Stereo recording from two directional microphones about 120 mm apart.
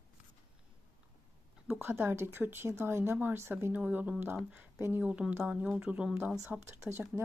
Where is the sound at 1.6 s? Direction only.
15° right (ahead or behind).